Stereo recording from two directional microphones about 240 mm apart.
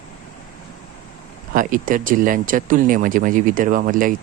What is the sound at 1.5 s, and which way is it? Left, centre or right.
Speech, right.